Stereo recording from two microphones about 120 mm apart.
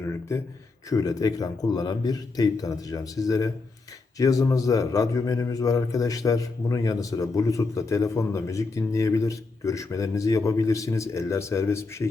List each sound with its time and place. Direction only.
0.0 s a man's voice: 20° left (ahead or behind)